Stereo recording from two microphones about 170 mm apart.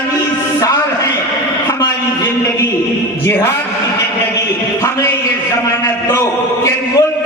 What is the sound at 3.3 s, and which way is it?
Speech, 15° left (ahead or behind).